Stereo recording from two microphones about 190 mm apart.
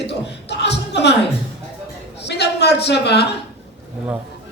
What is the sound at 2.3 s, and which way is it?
Speech, 60° left (ahead or behind).